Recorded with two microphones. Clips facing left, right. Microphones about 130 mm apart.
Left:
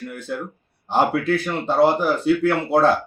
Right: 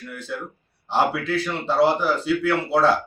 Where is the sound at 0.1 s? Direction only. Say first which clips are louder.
Left 3 dB; 50° left (ahead or behind).